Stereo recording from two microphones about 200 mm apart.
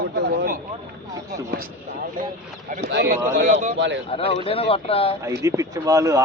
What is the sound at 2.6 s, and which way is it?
A man's voice, 40° right (ahead or behind).